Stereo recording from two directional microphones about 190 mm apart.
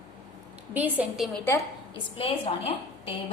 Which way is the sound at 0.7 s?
10° right (ahead or behind).